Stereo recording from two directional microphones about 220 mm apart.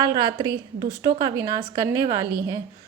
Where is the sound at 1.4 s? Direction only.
15° right (ahead or behind).